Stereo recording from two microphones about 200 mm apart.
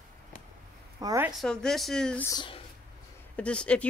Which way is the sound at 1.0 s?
15° right (ahead or behind).